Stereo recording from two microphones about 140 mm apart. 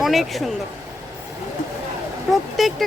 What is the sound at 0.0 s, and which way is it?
Speech, centre (ahead or behind).